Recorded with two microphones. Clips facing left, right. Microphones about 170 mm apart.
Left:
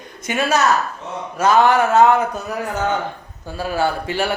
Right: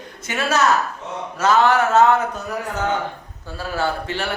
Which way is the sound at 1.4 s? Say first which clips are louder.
Left 2 dB; 15° left (ahead or behind).